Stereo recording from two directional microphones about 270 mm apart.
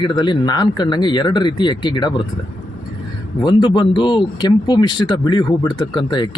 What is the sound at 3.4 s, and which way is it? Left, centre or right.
Speech, centre.